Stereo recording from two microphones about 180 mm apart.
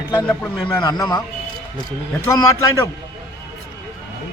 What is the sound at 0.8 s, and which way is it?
Speech, 25° left (ahead or behind).